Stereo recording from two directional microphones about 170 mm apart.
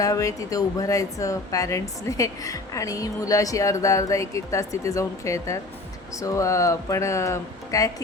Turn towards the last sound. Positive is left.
turn(degrees=20)  # may be behind; listen again after turning